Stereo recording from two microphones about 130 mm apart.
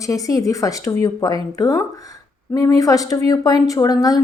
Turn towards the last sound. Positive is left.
turn(degrees=30)  # may be behind; listen again after turning